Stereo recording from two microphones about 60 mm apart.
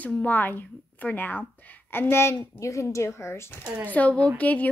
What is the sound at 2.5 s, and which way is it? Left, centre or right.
Speech, left.